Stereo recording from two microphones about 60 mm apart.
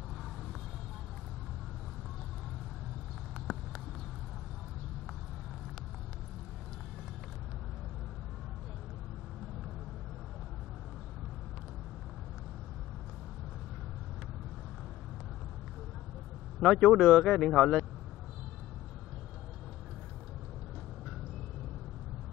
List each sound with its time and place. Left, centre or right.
16.5 s speech: centre